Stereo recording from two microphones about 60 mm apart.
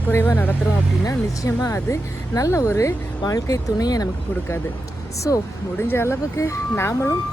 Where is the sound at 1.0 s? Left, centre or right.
Left.